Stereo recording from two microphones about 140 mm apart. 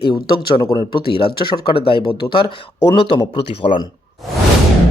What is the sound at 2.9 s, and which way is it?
Speech, 25° left (ahead or behind).